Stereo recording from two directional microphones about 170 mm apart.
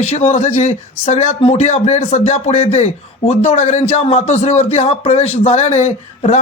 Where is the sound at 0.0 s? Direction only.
40° left (ahead or behind).